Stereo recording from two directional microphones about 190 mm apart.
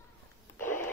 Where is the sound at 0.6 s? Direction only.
10° left (ahead or behind).